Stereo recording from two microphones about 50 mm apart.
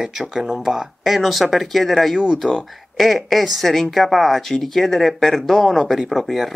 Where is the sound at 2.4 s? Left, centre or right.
Centre.